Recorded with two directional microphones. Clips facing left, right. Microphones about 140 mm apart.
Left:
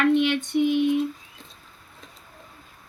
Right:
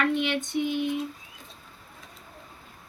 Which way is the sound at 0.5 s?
5° left (ahead or behind).